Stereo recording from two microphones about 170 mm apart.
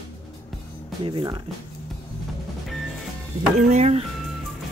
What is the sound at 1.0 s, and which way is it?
Speech, 25° right (ahead or behind).